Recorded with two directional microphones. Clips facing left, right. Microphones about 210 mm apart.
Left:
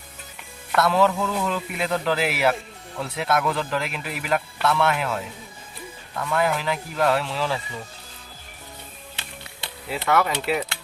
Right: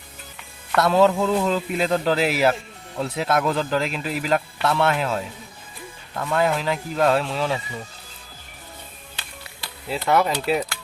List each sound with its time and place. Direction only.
0.8 s speech: 25° right (ahead or behind)
9.9 s speech: 25° right (ahead or behind)